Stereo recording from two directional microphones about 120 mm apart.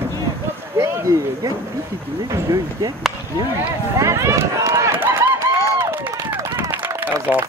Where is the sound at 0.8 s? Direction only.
25° right (ahead or behind).